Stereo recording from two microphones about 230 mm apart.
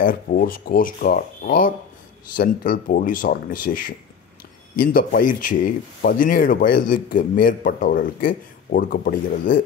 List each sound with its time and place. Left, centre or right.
0.0 s speech: left